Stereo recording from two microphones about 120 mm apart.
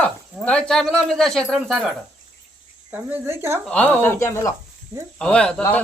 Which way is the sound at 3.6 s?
10° left (ahead or behind).